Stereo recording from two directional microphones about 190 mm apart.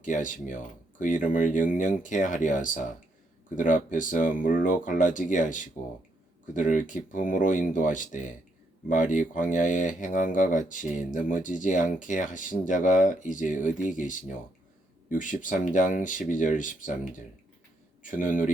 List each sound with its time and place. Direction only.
0.0 s speech: 40° left (ahead or behind)